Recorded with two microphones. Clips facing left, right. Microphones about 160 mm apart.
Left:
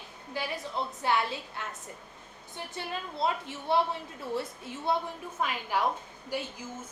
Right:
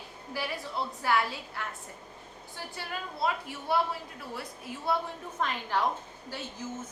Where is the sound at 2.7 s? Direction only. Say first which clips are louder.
Left 2 dB; 25° left (ahead or behind).